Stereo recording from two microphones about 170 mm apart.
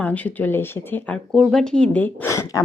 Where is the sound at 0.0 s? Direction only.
10° left (ahead or behind).